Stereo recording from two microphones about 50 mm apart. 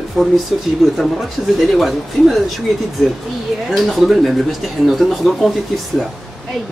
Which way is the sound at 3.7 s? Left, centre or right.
Centre.